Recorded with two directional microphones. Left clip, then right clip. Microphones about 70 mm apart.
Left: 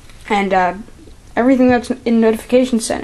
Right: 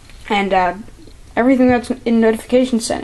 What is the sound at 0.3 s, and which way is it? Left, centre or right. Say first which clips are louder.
Speech: left 1 dB; left.